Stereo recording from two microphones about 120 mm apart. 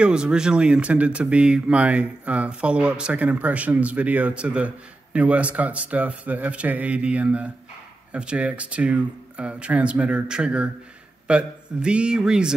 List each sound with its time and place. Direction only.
0.0 s speech: 5° right (ahead or behind)